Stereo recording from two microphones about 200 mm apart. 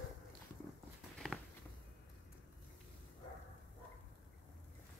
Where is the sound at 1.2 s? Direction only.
Centre (ahead or behind).